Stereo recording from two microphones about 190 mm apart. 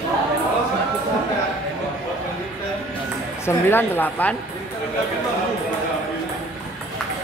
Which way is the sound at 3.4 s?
10° left (ahead or behind).